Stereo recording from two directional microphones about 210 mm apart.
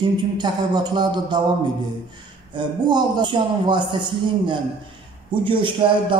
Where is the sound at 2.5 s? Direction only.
20° right (ahead or behind).